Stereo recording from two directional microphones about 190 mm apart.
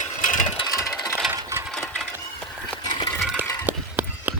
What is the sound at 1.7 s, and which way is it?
Sewing machine, centre (ahead or behind).